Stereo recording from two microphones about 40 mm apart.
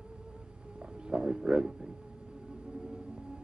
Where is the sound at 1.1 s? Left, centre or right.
Centre.